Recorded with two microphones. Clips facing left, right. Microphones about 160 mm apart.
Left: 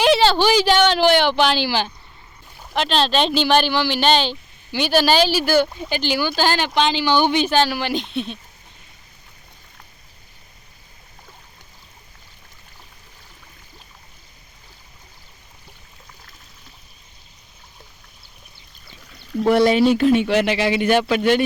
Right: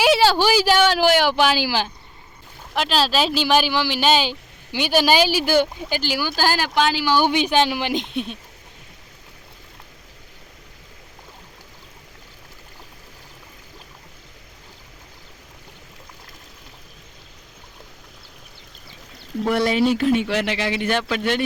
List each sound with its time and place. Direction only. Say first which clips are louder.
0.0 s speech: left 1 dB; 10° right (ahead or behind)
19.5 s a man's voice: left 4 dB; 25° left (ahead or behind)